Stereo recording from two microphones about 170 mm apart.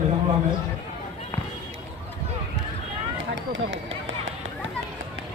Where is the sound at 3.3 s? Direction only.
90° right.